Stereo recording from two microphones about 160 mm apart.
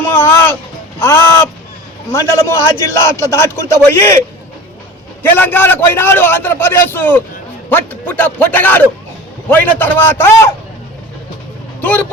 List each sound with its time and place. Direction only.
0.0 s music: 15° left (ahead or behind)
0.9 s a man's voice: 15° left (ahead or behind)
5.2 s a man's voice: 10° left (ahead or behind)
11.8 s speech: 10° left (ahead or behind)